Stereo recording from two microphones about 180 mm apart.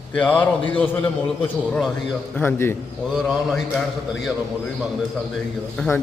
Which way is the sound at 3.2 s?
Centre (ahead or behind).